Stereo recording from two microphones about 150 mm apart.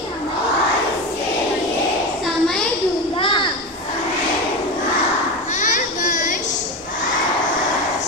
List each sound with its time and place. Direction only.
2.2 s a sound: centre (ahead or behind)
3.2 s children playing: 35° left (ahead or behind)
5.5 s children playing: 55° left (ahead or behind)